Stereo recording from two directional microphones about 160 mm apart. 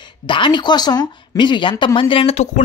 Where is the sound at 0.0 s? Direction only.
30° left (ahead or behind).